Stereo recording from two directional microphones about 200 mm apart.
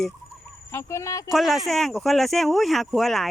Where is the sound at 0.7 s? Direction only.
15° left (ahead or behind).